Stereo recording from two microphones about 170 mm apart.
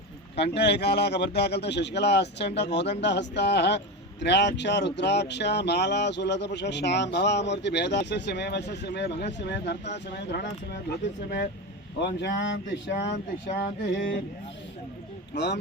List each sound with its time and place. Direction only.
0.5 s speech: 80° left
11.9 s speech: 85° left
15.3 s speech: 90° left